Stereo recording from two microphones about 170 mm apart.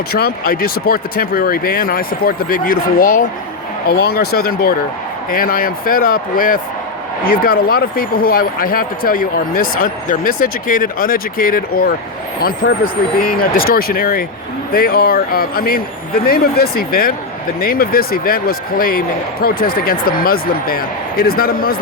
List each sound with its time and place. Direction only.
0.1 s speech: 65° left (ahead or behind)
3.8 s speech: 65° left (ahead or behind)